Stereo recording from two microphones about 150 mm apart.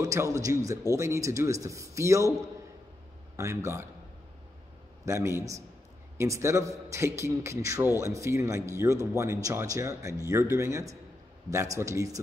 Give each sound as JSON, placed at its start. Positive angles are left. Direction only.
{"t": 0.0, "sound": "speech", "side_deg": -20}
{"t": 3.3, "sound": "a man's voice", "side_deg": -20}
{"t": 5.0, "sound": "speech", "side_deg": -20}